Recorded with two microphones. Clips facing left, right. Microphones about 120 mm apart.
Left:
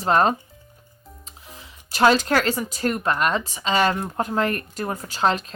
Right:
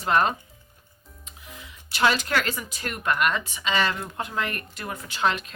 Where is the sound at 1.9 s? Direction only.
40° left (ahead or behind).